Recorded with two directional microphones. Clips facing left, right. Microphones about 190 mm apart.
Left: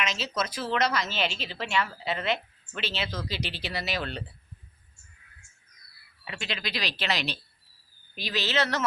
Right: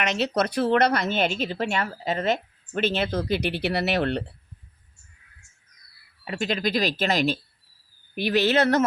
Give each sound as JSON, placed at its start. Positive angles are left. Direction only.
{"t": 0.0, "sound": "speech", "side_deg": -65}
{"t": 6.2, "sound": "speech", "side_deg": -45}
{"t": 8.1, "sound": "speech", "side_deg": -60}